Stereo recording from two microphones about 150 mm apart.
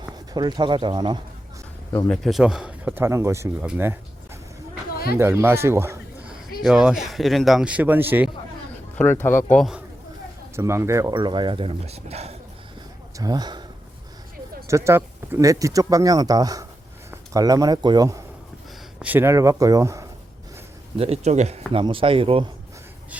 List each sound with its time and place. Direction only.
0.0 s speech: 30° right (ahead or behind)
2.0 s speech: centre (ahead or behind)
5.1 s speech: 15° right (ahead or behind)
6.6 s speech: 5° right (ahead or behind)
9.2 s speech: 15° left (ahead or behind)
9.6 s speech: centre (ahead or behind)
10.5 s speech: 20° right (ahead or behind); by 12.4 s 45° right (ahead or behind)
13.1 s speech: 25° right (ahead or behind)
14.7 s speech: 20° right (ahead or behind)
18.9 s speech: 10° right (ahead or behind)
21.0 s speech: 45° right (ahead or behind)
21.7 s speech: 35° right (ahead or behind)